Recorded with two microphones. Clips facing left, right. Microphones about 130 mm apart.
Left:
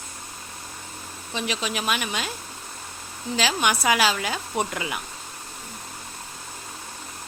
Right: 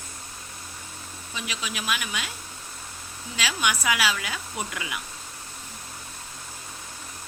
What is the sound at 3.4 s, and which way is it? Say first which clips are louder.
Speech: left 4 dB; 35° left (ahead or behind).